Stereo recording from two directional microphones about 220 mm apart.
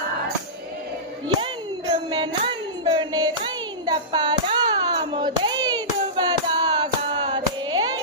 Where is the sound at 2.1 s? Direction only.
20° right (ahead or behind).